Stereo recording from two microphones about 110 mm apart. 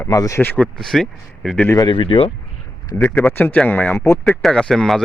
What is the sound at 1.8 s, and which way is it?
Speech, 50° left (ahead or behind).